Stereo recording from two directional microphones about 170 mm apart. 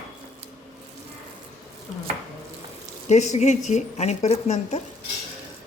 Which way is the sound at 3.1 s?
40° left (ahead or behind).